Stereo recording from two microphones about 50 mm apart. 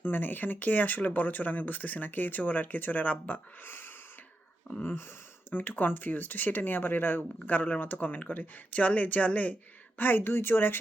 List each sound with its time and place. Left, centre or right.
0.0 s speech: left
3.7 s a sound: left
4.7 s speech: left
10.0 s speech: left